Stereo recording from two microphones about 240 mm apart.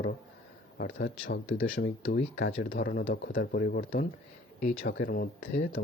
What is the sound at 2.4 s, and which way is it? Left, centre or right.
Speech, left.